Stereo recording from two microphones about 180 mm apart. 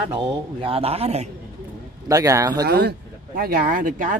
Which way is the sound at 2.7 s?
65° right (ahead or behind).